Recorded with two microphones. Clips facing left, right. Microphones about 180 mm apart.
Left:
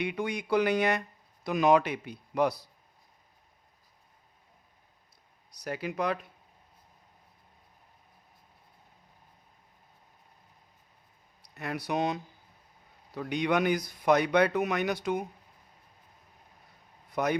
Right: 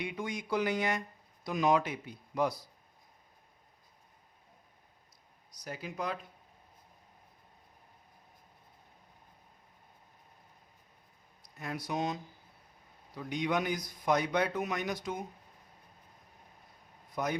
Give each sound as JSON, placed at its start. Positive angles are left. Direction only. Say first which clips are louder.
{"t": 0.0, "sound": "speech", "louder": "left 5 dB", "side_deg": 70}
{"t": 5.5, "sound": "speech", "louder": "left 7 dB", "side_deg": 70}
{"t": 11.4, "sound": "speech", "louder": "left 4 dB", "side_deg": 70}
{"t": 17.1, "sound": "a man's voice", "louder": "left 5 dB", "side_deg": 70}